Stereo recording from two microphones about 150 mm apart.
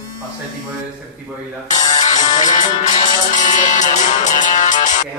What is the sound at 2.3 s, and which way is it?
Music, 55° left (ahead or behind).